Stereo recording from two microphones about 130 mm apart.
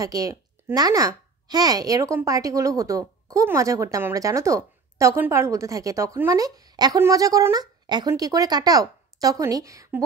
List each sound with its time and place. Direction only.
0.0 s a woman's voice: 25° right (ahead or behind)